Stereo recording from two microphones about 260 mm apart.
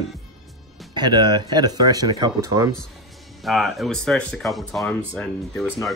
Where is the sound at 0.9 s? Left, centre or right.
Centre.